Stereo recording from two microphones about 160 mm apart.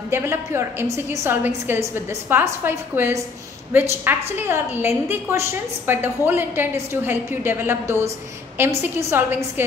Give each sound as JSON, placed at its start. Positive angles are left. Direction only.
{"t": 0.1, "sound": "a woman's voice", "side_deg": -15}